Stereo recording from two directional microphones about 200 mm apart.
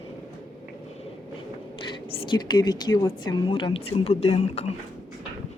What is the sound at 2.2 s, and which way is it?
A woman's voice, 20° left (ahead or behind).